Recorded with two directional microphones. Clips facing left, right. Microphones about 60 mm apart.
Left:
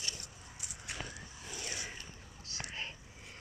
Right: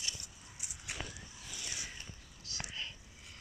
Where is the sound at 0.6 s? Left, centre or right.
Left.